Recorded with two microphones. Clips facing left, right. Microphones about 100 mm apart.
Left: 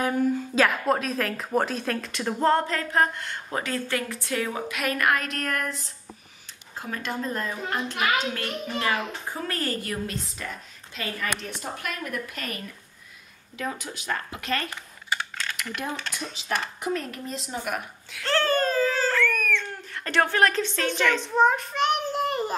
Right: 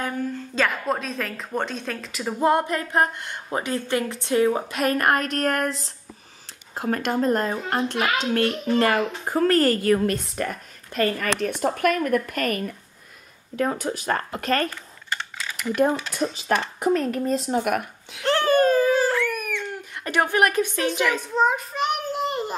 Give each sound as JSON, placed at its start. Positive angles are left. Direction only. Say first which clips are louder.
{"t": 0.0, "sound": "a woman's voice", "louder": "left 4 dB", "side_deg": 5}
{"t": 5.5, "sound": "speech", "louder": "right 3 dB", "side_deg": -65}
{"t": 6.9, "sound": "speech", "louder": "right 9 dB", "side_deg": -55}
{"t": 15.3, "sound": "a sound", "louder": "right 3 dB", "side_deg": -5}
{"t": 16.5, "sound": "speech", "louder": "right 5 dB", "side_deg": -45}
{"t": 18.1, "sound": "a sound", "louder": "right 4 dB", "side_deg": -15}
{"t": 21.5, "sound": "child singing", "louder": "left 1 dB", "side_deg": -5}